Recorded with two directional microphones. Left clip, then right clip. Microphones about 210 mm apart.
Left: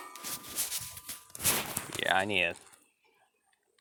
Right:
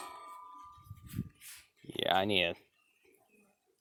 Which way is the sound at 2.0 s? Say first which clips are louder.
Left 1 dB; 30° right (ahead or behind).